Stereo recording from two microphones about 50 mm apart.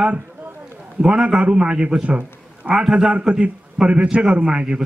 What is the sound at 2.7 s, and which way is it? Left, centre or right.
A man's voice, centre.